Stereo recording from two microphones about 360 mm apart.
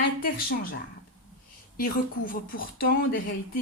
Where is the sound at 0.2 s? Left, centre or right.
Left.